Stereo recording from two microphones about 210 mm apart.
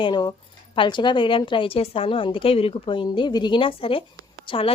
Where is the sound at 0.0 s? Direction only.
20° left (ahead or behind).